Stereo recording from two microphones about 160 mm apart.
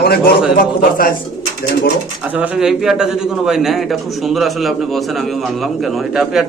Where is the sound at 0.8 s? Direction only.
65° left (ahead or behind).